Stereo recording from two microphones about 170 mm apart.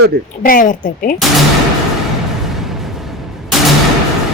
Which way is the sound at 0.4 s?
55° left (ahead or behind).